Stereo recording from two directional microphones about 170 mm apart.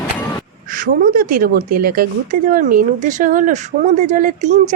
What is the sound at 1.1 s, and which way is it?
Speech, 60° right (ahead or behind).